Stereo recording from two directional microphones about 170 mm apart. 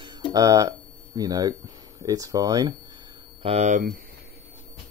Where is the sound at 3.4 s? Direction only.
40° right (ahead or behind).